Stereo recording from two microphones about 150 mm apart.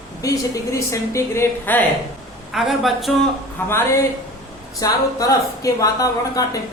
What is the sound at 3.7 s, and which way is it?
A woman's voice, 15° left (ahead or behind).